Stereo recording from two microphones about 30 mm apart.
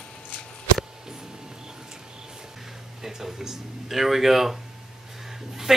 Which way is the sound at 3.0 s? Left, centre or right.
Centre.